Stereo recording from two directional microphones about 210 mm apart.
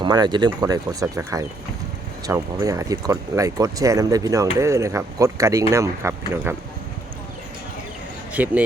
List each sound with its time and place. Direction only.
0.0 s speech: 20° right (ahead or behind)
8.3 s speech: 5° right (ahead or behind)